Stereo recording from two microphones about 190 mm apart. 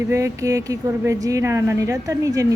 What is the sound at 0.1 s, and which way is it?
Speech, 15° right (ahead or behind).